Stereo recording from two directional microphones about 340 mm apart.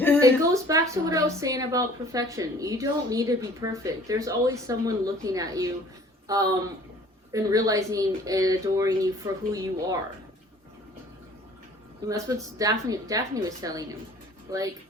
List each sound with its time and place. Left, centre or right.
0.2 s a woman's voice: centre
12.0 s a woman's voice: centre